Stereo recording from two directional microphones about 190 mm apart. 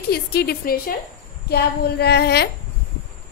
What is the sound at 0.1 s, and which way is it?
A woman's voice, 55° left (ahead or behind).